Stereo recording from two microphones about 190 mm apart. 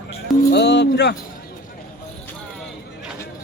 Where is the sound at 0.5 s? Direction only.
65° left (ahead or behind).